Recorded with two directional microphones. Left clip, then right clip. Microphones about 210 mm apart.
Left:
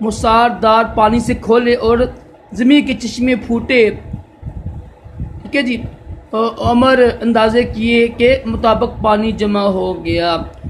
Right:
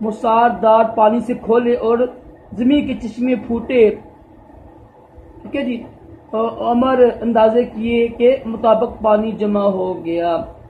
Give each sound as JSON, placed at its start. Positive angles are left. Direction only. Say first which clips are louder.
{"t": 0.0, "sound": "speech", "louder": "left 2 dB", "side_deg": 30}
{"t": 6.3, "sound": "a man's voice", "louder": "left 3 dB", "side_deg": 30}